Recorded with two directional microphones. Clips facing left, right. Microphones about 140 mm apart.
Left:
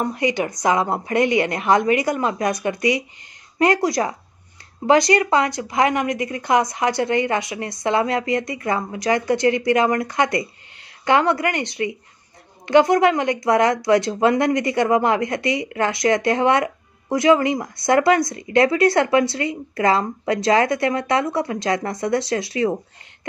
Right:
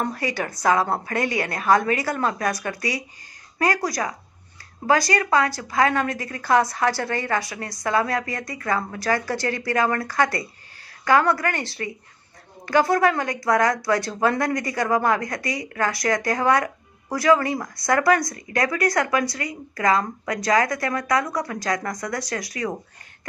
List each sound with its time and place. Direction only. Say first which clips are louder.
0.0 s a woman's voice: left 5 dB; 20° left (ahead or behind)